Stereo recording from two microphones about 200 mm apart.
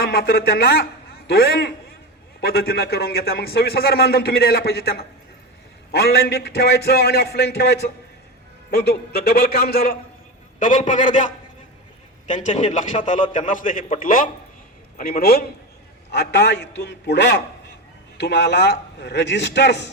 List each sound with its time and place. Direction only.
0.0 s a man's voice: 50° left (ahead or behind)
12.3 s a man's voice: 35° left (ahead or behind); by 19.9 s 60° left (ahead or behind)